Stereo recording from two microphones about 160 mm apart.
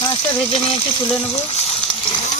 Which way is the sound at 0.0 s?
35° left (ahead or behind).